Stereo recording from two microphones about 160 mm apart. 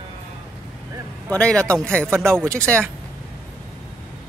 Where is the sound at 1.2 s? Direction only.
5° left (ahead or behind).